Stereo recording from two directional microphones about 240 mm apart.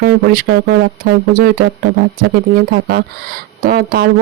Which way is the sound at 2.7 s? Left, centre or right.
Right.